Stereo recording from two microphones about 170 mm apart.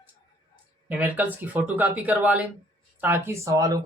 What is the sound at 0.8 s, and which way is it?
Speech, 10° right (ahead or behind).